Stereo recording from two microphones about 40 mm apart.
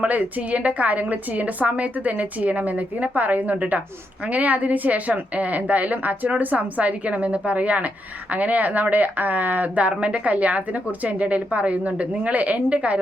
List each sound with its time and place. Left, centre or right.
0.0 s a woman's voice: right